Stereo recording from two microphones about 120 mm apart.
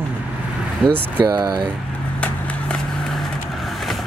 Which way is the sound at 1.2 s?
35° right (ahead or behind).